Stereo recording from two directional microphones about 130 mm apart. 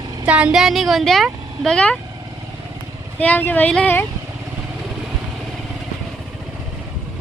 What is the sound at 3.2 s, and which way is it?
Speech, 15° left (ahead or behind).